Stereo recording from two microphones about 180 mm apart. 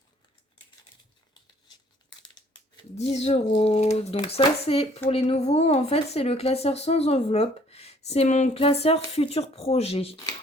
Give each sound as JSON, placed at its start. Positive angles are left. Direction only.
{"t": 2.9, "sound": "speech", "side_deg": 40}